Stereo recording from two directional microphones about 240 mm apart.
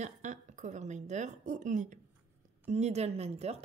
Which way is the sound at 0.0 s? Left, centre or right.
Right.